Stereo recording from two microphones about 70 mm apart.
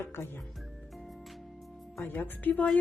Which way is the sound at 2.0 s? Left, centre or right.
Left.